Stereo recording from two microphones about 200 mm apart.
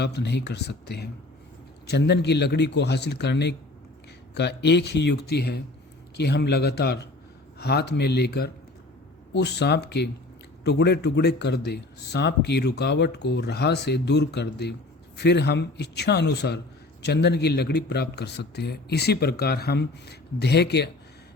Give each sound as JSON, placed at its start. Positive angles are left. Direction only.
{"t": 0.0, "sound": "speech", "side_deg": 55}